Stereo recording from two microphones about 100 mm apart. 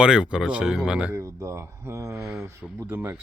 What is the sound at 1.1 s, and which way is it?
Speech, 30° right (ahead or behind).